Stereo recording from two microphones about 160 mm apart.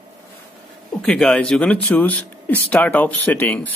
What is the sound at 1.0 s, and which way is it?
Speech, 5° left (ahead or behind).